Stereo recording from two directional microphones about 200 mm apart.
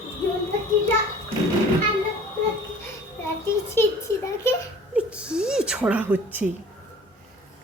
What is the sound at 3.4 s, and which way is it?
A child's voice, 10° left (ahead or behind).